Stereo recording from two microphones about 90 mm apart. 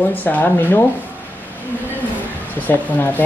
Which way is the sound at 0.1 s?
20° left (ahead or behind).